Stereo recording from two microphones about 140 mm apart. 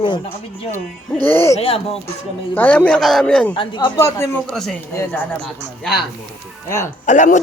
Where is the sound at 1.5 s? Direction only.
45° left (ahead or behind).